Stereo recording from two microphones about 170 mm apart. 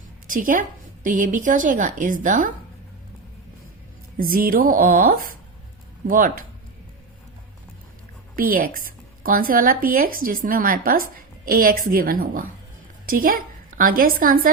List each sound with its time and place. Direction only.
0.3 s a woman's voice: 50° right (ahead or behind)
4.2 s speech: 55° right (ahead or behind)
8.4 s a woman's voice: 55° right (ahead or behind)